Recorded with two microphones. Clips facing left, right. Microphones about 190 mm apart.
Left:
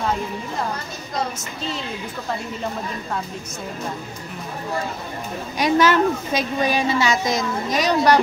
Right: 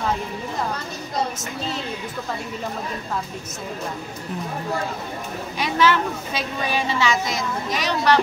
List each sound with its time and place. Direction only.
5.6 s a woman's voice: 45° left (ahead or behind)